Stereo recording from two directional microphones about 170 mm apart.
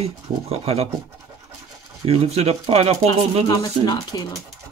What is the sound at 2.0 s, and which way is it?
Speech, 35° right (ahead or behind).